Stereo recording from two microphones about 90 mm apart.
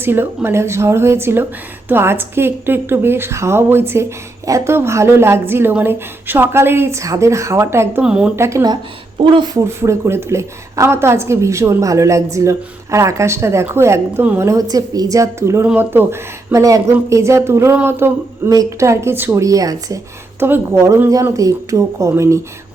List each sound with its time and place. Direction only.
0.0 s a woman's voice: 25° right (ahead or behind)
8.0 s speech: 10° right (ahead or behind)
8.4 s a woman's voice: 30° right (ahead or behind)
9.2 s speech: 70° right (ahead or behind)
9.6 s a woman's voice: 30° right (ahead or behind)
18.4 s a woman's voice: 40° right (ahead or behind)
20.4 s a woman's voice: 30° right (ahead or behind)